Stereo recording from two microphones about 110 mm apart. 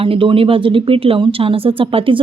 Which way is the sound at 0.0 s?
55° right (ahead or behind).